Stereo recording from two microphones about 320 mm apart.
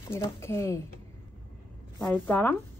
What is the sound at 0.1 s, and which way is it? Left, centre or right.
Speech, centre.